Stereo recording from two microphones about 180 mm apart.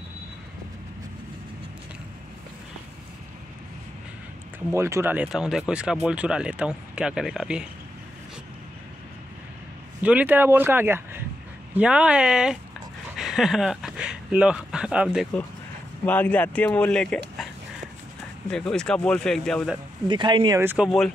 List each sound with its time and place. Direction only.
4.7 s speech: 15° right (ahead or behind)
10.0 s speech: 10° right (ahead or behind)
16.1 s speech: 10° left (ahead or behind)
18.5 s speech: 5° left (ahead or behind)
20.1 s speech: 25° right (ahead or behind)
20.6 s speech: 5° right (ahead or behind)